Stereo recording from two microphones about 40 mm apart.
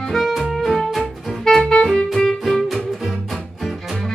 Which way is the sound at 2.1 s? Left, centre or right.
Centre.